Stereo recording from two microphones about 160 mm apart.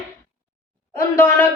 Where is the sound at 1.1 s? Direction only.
15° left (ahead or behind).